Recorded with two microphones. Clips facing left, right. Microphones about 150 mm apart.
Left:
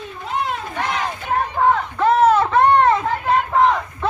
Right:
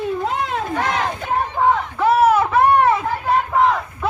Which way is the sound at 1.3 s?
10° right (ahead or behind).